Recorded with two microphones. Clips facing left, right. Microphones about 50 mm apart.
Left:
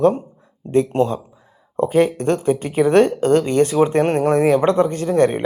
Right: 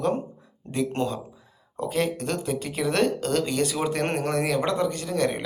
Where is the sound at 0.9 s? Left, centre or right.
Left.